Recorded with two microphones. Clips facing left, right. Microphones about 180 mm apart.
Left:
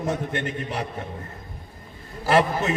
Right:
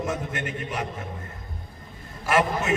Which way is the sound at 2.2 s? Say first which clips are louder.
Left 3 dB; 35° left (ahead or behind).